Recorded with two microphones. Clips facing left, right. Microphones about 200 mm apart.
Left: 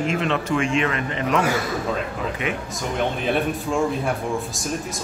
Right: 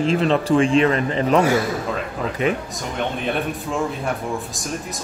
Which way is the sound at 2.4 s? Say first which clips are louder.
Right 7 dB; 35° right (ahead or behind).